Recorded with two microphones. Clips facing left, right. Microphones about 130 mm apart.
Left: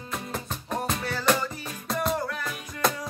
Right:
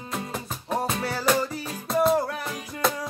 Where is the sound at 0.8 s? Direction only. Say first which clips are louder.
Right 1 dB; 30° right (ahead or behind).